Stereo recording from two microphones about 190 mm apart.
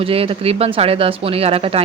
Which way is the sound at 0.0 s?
30° right (ahead or behind).